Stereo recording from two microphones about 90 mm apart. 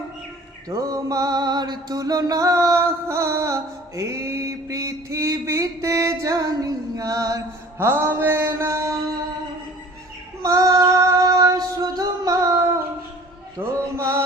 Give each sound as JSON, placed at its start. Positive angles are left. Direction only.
{"t": 0.7, "sound": "music", "side_deg": -40}
{"t": 7.8, "sound": "mantra", "side_deg": -25}
{"t": 10.4, "sound": "female singing", "side_deg": -35}
{"t": 13.6, "sound": "music", "side_deg": -30}